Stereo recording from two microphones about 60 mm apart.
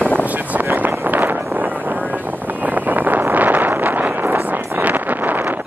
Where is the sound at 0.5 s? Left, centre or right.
Right.